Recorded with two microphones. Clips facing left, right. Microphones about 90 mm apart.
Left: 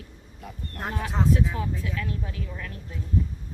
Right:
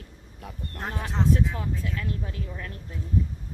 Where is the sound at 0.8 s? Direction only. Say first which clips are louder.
Left 1 dB; 5° left (ahead or behind).